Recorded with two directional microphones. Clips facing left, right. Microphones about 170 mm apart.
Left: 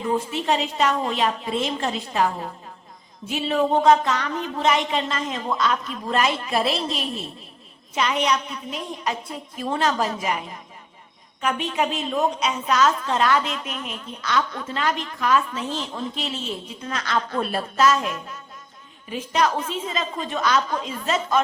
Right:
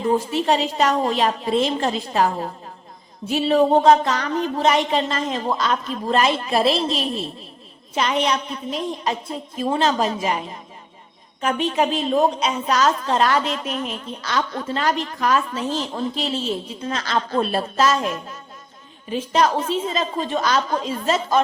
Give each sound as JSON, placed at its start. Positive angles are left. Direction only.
{"t": 0.0, "sound": "a woman's voice", "side_deg": -35}
{"t": 19.1, "sound": "a woman's voice", "side_deg": -30}